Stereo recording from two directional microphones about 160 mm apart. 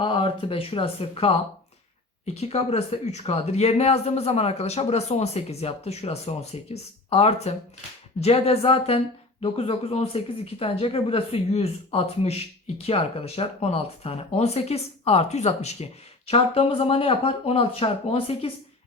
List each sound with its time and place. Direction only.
0.0 s speech: 35° left (ahead or behind)